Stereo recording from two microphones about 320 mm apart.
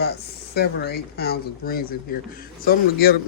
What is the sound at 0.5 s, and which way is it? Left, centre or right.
Speech, left.